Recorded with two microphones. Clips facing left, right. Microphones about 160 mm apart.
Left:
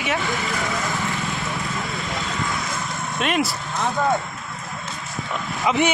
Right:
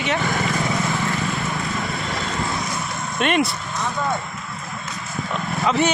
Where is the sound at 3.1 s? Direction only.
Centre (ahead or behind).